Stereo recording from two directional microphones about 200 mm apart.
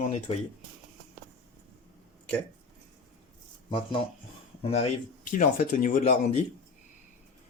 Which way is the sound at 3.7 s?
25° left (ahead or behind).